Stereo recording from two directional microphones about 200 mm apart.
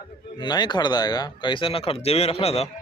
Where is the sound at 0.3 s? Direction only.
20° left (ahead or behind).